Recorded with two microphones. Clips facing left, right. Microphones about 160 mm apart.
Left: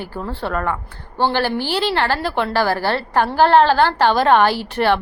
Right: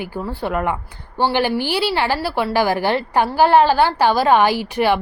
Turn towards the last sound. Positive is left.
turn(degrees=-10)  # may be behind; listen again after turning